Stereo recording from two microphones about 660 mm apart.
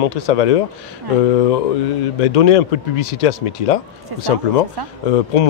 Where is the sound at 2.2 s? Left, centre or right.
Left.